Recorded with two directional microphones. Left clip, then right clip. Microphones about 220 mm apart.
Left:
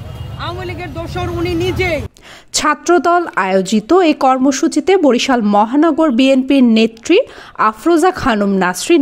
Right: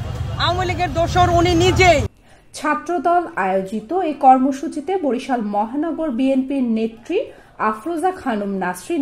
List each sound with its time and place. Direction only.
0.4 s speech: 10° right (ahead or behind)
2.5 s a woman's voice: 40° left (ahead or behind)